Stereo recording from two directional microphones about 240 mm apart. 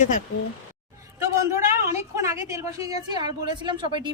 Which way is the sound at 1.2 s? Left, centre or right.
Centre.